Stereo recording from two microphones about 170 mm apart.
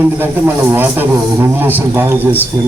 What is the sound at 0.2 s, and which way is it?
A man's voice, 10° right (ahead or behind).